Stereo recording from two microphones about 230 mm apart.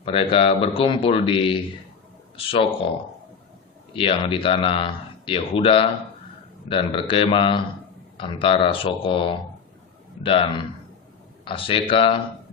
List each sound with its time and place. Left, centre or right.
0.0 s a man's voice: left
3.9 s a man's voice: left